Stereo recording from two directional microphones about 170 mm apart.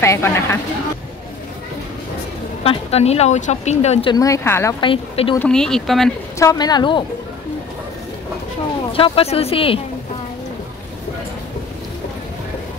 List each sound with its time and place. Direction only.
0.0 s speech: 15° left (ahead or behind)
2.6 s speech: 35° left (ahead or behind)
4.1 s a woman's voice: 20° left (ahead or behind)
4.7 s speech: 30° left (ahead or behind)
5.4 s speech: 5° left (ahead or behind)
6.4 s a woman's voice: 20° left (ahead or behind)
8.9 s speech: 35° left (ahead or behind)